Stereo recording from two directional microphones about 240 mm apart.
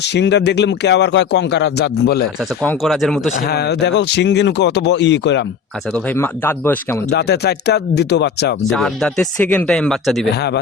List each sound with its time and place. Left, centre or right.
0.0 s speech: left
2.6 s speech: centre
3.4 s speech: left
5.9 s speech: centre
7.1 s speech: left
8.7 s speech: centre